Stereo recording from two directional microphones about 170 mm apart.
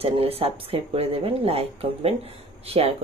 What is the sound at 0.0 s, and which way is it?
Speech, 35° right (ahead or behind).